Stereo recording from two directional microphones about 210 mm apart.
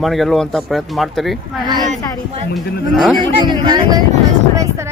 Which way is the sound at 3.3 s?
20° right (ahead or behind).